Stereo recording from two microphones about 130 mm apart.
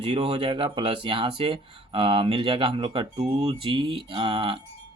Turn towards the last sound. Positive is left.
turn(degrees=-40)  # may be behind; listen again after turning